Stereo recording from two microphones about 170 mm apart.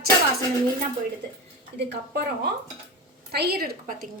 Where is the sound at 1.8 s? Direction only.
75° right (ahead or behind).